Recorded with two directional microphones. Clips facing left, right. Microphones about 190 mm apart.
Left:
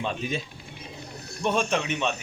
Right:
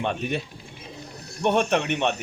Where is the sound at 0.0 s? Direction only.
65° right (ahead or behind).